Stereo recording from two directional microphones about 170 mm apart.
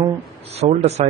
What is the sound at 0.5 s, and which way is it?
Speech, 40° right (ahead or behind).